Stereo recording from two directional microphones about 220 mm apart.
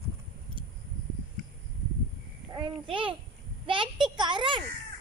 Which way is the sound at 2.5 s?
20° right (ahead or behind).